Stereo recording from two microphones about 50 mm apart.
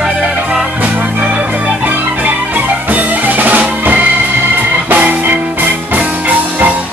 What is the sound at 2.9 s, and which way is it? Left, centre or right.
Music, right.